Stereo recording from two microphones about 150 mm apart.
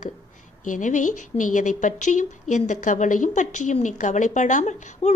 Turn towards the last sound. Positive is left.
turn(degrees=50)  # may be behind; listen again after turning